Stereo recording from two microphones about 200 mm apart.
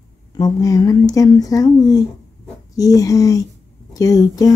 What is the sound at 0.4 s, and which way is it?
Speech, 20° left (ahead or behind).